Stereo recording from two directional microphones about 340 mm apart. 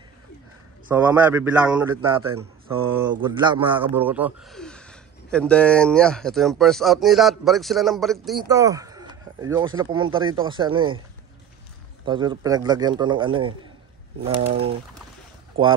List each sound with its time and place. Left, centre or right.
0.8 s a man's voice: centre
12.0 s speech: centre